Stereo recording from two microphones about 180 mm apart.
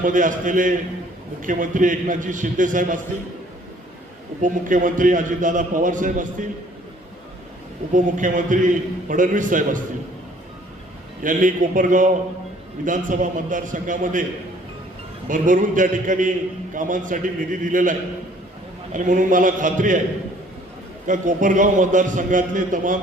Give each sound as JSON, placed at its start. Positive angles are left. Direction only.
{"t": 0.0, "sound": "a man's voice", "side_deg": -45}
{"t": 4.4, "sound": "a man's voice", "side_deg": -45}
{"t": 7.9, "sound": "a man's voice", "side_deg": -45}
{"t": 11.2, "sound": "a man's voice", "side_deg": -45}
{"t": 15.3, "sound": "a man's voice", "side_deg": -45}
{"t": 18.9, "sound": "a man's voice", "side_deg": -45}
{"t": 21.1, "sound": "a man's voice", "side_deg": -45}